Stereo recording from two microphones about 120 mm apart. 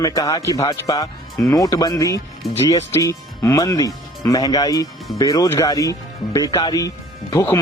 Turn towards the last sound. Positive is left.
turn(degrees=20)  # may be behind; listen again after turning